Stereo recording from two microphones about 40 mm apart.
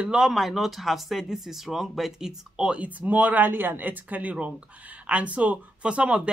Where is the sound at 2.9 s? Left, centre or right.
Right.